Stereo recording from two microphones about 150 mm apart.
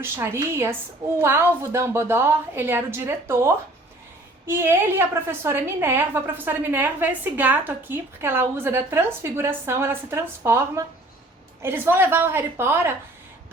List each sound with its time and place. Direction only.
0.0 s a woman's voice: 15° right (ahead or behind)